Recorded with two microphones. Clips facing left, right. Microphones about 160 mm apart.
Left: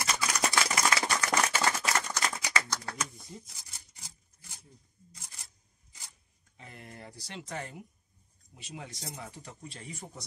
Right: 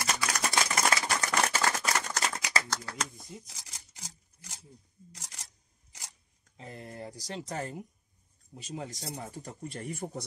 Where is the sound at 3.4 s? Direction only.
90° right.